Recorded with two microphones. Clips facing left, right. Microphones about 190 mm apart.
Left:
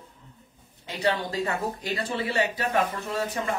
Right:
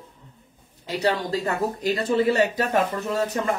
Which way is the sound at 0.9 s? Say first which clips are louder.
Right 3 dB; 35° right (ahead or behind).